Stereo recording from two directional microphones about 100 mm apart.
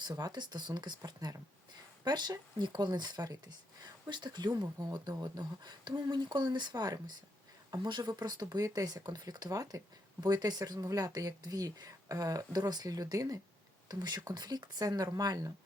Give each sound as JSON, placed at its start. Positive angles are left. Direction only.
{"t": 0.0, "sound": "speech", "side_deg": -45}